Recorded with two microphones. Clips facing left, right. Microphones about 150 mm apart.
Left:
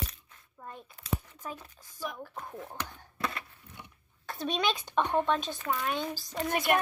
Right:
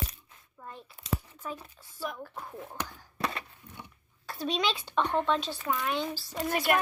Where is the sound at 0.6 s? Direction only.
40° left (ahead or behind).